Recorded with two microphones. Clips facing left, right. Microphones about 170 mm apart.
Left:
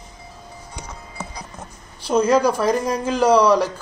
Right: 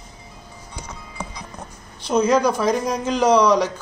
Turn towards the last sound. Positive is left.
turn(degrees=5)  # may be behind; listen again after turning